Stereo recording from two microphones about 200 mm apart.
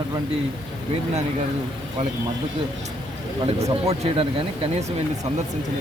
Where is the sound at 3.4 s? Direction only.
30° right (ahead or behind).